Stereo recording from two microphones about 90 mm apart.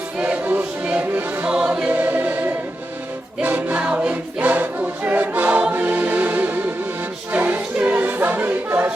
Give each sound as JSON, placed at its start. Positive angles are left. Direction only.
{"t": 0.2, "sound": "music", "side_deg": -15}